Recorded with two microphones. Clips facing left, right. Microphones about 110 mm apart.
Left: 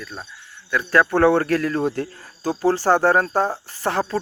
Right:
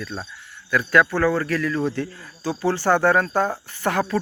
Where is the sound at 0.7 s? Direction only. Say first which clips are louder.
Even; 20° left (ahead or behind).